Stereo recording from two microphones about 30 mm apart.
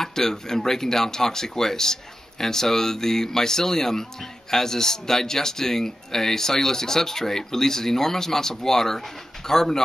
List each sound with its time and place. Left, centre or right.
0.0 s speech: centre